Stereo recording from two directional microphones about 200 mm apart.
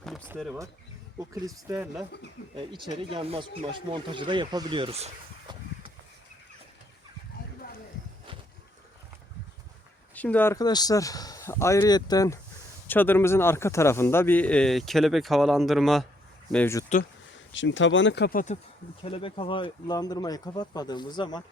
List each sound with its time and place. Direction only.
0.0 s power windows: centre (ahead or behind)
1.2 s speech: 15° right (ahead or behind)
2.6 s speech: 25° right (ahead or behind)
10.2 s a man's voice: 10° left (ahead or behind)
17.5 s speech: 70° left (ahead or behind); by 18.5 s 45° left (ahead or behind)
19.0 s speech: 25° left (ahead or behind)